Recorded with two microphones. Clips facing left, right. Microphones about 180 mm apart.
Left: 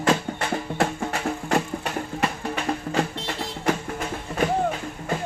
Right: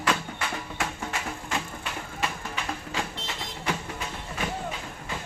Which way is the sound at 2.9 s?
50° left (ahead or behind).